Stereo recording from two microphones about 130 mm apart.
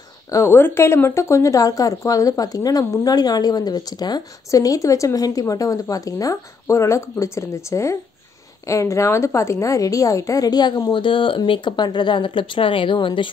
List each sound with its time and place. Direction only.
0.3 s a woman's voice: 20° left (ahead or behind); by 13.3 s 40° left (ahead or behind)